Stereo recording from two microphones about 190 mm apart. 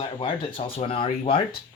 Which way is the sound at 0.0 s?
25° left (ahead or behind).